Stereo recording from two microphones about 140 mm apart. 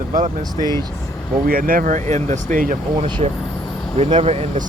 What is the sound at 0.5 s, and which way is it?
Speech, 25° left (ahead or behind).